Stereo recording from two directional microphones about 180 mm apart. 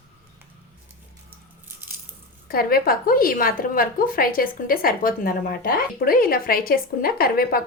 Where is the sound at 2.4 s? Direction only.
55° left (ahead or behind).